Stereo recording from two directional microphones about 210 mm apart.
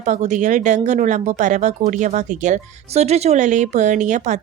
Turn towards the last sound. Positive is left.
turn(degrees=-35)  # may be behind; listen again after turning